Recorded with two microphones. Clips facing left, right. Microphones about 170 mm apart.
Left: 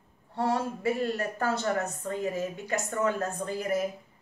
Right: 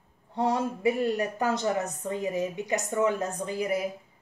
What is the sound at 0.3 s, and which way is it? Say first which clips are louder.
Speech: right 2 dB; 15° right (ahead or behind).